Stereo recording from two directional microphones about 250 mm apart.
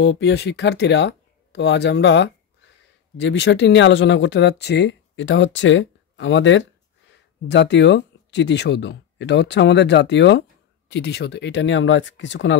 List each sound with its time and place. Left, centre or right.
0.0 s speech: left